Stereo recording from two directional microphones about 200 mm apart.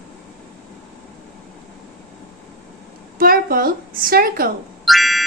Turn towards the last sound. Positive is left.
turn(degrees=0)  # may be behind; listen again after turning